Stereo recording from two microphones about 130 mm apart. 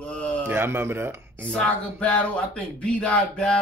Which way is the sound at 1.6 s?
10° left (ahead or behind).